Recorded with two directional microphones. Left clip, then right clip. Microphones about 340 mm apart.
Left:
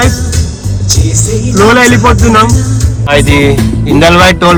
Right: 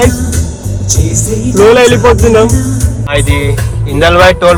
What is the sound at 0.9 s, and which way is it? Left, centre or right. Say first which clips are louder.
Music: left 2 dB; right.